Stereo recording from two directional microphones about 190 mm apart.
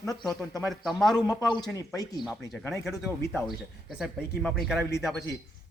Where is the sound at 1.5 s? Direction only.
20° left (ahead or behind).